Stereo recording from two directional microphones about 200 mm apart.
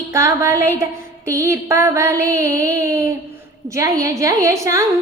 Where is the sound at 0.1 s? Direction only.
15° right (ahead or behind).